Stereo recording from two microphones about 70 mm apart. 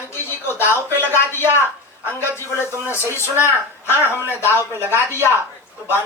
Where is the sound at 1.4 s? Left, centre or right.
Right.